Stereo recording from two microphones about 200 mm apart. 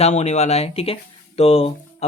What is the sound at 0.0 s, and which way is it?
Speech, 35° left (ahead or behind).